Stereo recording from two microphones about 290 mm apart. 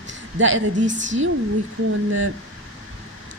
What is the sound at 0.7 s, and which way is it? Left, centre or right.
Speech, right.